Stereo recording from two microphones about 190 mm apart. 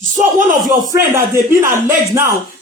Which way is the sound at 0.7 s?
15° right (ahead or behind).